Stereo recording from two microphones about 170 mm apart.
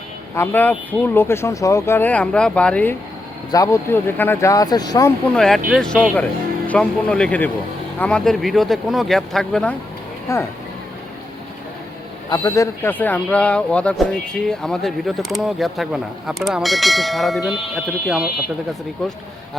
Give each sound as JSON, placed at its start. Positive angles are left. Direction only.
{"t": 0.3, "sound": "speech", "side_deg": 10}
{"t": 3.5, "sound": "speech", "side_deg": 20}
{"t": 5.7, "sound": "speech", "side_deg": 5}
{"t": 10.3, "sound": "speech", "side_deg": 15}
{"t": 12.3, "sound": "speech", "side_deg": 20}